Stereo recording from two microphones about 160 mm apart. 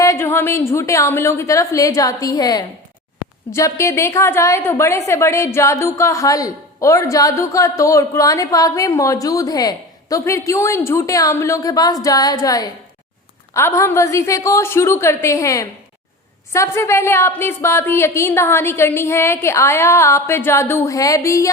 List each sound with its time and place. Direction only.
0.0 s a woman's voice: 20° left (ahead or behind)